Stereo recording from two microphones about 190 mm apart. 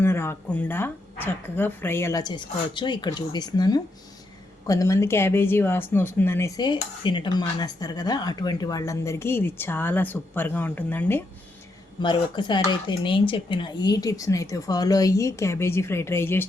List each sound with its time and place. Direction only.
0.0 s speech: 10° left (ahead or behind)
11.9 s speech: 25° left (ahead or behind)